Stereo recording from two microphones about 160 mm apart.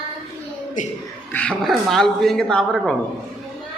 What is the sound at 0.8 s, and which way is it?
Speech, 55° left (ahead or behind).